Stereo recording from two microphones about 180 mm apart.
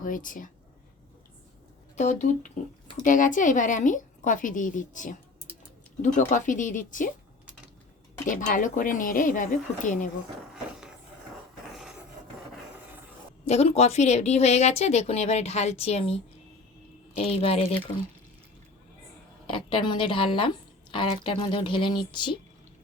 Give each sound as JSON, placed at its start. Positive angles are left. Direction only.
{"t": 0.0, "sound": "a woman's voice", "side_deg": 50}
{"t": 2.0, "sound": "a woman's voice", "side_deg": 40}
{"t": 8.3, "sound": "a woman's voice", "side_deg": 45}
{"t": 10.5, "sound": "a sound", "side_deg": -5}
{"t": 11.7, "sound": "filing", "side_deg": 0}
{"t": 13.4, "sound": "a woman's voice", "side_deg": 35}
{"t": 19.5, "sound": "speech", "side_deg": 30}